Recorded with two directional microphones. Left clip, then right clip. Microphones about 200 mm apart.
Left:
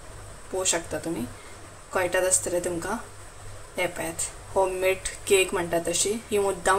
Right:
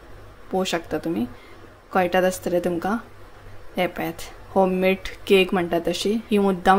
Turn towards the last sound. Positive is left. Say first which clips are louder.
# right 5 dB
turn(degrees=-35)  # may be behind; listen again after turning